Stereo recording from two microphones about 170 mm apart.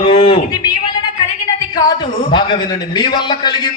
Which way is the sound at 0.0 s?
30° left (ahead or behind).